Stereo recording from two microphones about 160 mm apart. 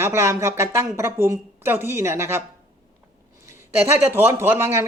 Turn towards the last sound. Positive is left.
turn(degrees=-15)  # may be behind; listen again after turning